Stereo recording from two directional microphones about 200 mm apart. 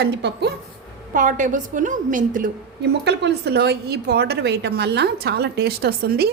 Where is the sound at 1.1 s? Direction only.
40° right (ahead or behind).